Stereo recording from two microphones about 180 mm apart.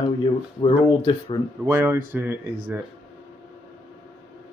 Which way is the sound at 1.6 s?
15° right (ahead or behind).